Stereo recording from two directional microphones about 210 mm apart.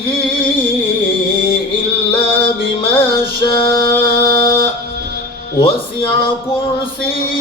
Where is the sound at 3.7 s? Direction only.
50° right (ahead or behind).